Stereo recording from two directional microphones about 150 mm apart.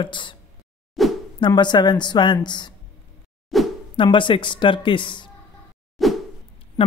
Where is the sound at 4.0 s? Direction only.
35° left (ahead or behind).